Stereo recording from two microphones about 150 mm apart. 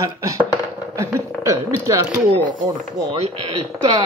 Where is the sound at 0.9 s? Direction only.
20° right (ahead or behind).